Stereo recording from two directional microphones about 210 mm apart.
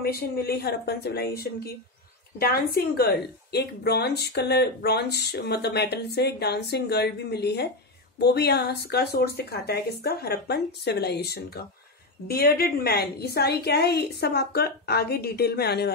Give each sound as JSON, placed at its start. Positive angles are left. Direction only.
{"t": 0.0, "sound": "speech", "side_deg": 45}